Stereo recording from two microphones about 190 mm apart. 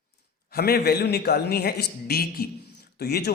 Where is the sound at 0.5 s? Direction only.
55° left (ahead or behind).